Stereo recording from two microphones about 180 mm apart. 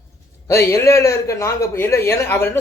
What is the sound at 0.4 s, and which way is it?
Speech, 15° left (ahead or behind).